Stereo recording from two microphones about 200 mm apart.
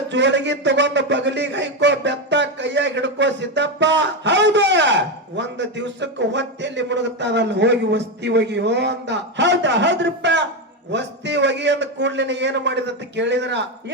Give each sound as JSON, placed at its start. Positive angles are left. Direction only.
{"t": 0.1, "sound": "a man's voice", "side_deg": -60}